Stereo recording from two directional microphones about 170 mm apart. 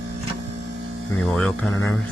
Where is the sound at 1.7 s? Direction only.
20° left (ahead or behind).